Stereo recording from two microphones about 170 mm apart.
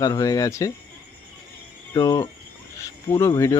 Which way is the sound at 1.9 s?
25° left (ahead or behind).